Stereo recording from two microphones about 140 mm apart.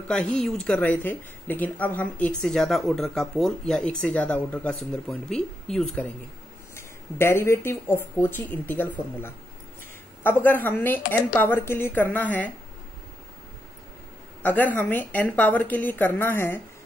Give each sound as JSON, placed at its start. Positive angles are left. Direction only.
{"t": 0.1, "sound": "speech", "side_deg": 5}
{"t": 6.7, "sound": "speech", "side_deg": 15}
{"t": 14.4, "sound": "speech", "side_deg": 10}